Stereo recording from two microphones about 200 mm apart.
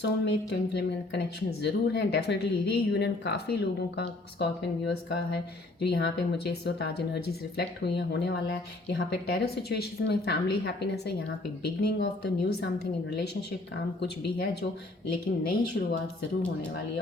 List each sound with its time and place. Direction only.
0.0 s a woman's voice: 60° left (ahead or behind)
15.8 s a woman's voice: 55° left (ahead or behind)